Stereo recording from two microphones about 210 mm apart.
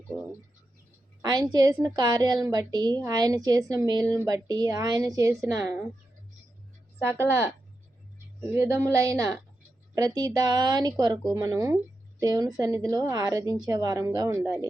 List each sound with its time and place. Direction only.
1.2 s a woman's voice: 20° right (ahead or behind)
7.0 s a woman's voice: 10° right (ahead or behind)